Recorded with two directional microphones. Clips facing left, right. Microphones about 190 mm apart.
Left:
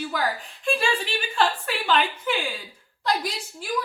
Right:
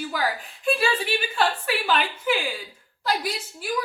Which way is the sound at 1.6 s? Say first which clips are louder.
Left 1 dB; 5° right (ahead or behind).